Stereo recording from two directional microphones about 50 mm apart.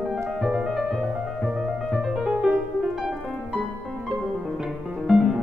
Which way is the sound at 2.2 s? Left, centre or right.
Centre.